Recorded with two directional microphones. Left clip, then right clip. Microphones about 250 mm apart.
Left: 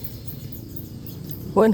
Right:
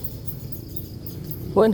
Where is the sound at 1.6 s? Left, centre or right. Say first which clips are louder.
Even; centre.